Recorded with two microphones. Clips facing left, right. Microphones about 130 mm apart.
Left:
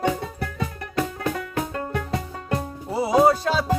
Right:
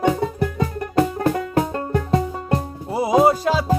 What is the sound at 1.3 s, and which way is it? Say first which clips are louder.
Music: right 6 dB; 35° right (ahead or behind).